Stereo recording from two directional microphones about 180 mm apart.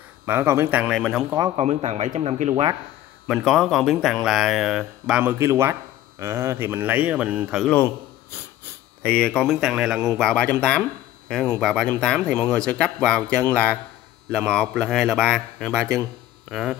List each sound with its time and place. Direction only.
0.3 s speech: 15° right (ahead or behind)
1.6 s speech: 35° right (ahead or behind)
3.3 s speech: centre (ahead or behind)
9.0 s speech: 5° left (ahead or behind)